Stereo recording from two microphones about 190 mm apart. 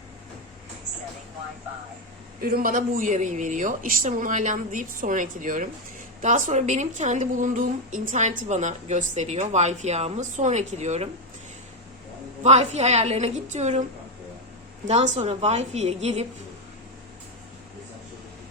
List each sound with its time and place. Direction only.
2.4 s a woman's voice: 50° right (ahead or behind)
12.4 s speech: 35° right (ahead or behind)
14.8 s speech: 35° right (ahead or behind)